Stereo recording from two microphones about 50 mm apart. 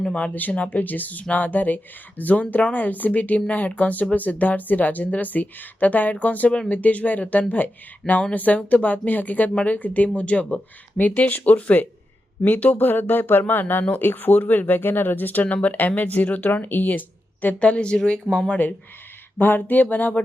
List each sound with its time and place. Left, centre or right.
0.0 s speech: centre
0.3 s speech: left
17.6 s speech: left
18.4 s speech: left